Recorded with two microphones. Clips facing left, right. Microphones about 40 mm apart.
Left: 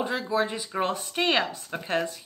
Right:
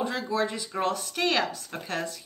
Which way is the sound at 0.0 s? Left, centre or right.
Centre.